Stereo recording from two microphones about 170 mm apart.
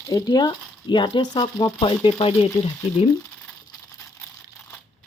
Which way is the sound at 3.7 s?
20° left (ahead or behind).